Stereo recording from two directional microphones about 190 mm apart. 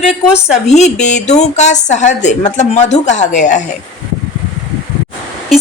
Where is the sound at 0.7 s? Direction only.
35° left (ahead or behind).